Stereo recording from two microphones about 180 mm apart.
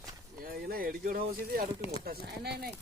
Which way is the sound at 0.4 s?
55° right (ahead or behind).